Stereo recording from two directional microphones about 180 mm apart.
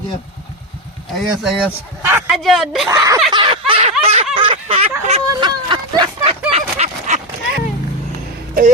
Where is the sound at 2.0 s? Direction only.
15° right (ahead or behind).